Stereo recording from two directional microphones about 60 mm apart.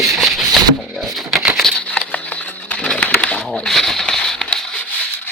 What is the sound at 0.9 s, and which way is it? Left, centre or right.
Typewriter, centre.